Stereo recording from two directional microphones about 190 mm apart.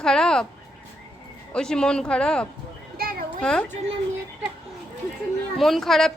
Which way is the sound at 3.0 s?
50° right (ahead or behind).